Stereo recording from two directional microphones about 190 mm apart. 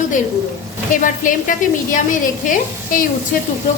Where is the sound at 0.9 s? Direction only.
45° left (ahead or behind).